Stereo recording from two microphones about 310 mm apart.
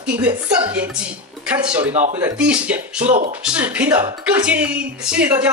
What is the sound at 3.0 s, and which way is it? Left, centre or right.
Speech, right.